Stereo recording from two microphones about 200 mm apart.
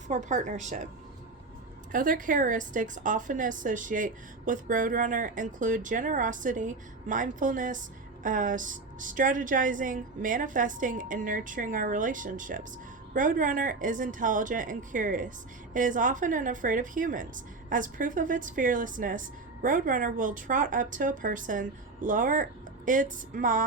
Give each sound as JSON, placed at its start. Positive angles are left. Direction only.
{"t": 0.1, "sound": "a woman's voice", "side_deg": -35}
{"t": 1.9, "sound": "a woman's voice", "side_deg": -40}